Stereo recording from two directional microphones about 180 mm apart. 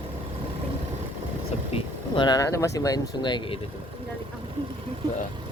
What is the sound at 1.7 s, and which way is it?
Speech, 25° left (ahead or behind).